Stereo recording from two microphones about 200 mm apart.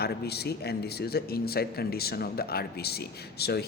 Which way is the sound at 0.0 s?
55° left (ahead or behind).